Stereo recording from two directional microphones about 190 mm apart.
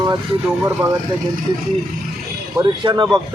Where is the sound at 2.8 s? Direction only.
25° right (ahead or behind).